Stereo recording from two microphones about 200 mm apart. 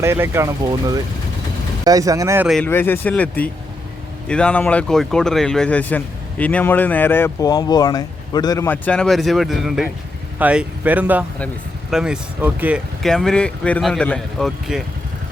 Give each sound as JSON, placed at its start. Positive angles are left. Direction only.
{"t": 0.0, "sound": "speech", "side_deg": -15}
{"t": 2.5, "sound": "speech", "side_deg": 5}